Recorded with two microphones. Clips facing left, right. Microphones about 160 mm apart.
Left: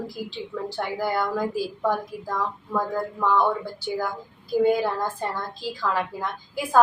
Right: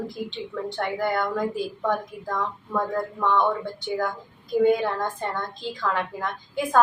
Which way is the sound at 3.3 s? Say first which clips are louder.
Even; 5° left (ahead or behind).